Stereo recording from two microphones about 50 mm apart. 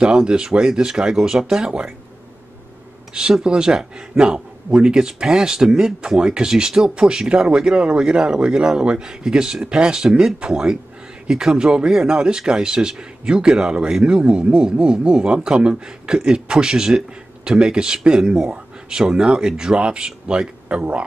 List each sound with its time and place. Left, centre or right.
0.0 s a man's voice: centre
3.1 s a man's voice: centre